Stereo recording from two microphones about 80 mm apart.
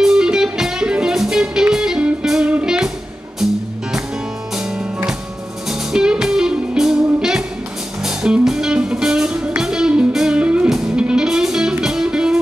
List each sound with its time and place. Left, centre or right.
0.0 s music: centre
4.6 s music: centre